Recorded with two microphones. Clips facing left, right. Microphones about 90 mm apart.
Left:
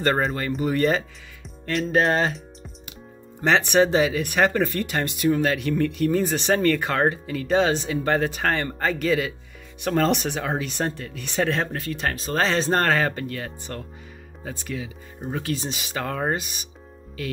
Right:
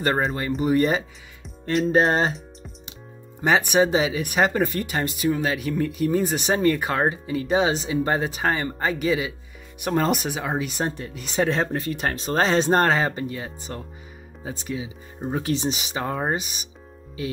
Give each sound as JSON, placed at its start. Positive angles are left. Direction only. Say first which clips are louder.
{"t": 0.0, "sound": "speech", "louder": "even", "side_deg": -5}
{"t": 1.9, "sound": "speech", "louder": "right 1 dB", "side_deg": -25}
{"t": 3.3, "sound": "speech", "louder": "even", "side_deg": -10}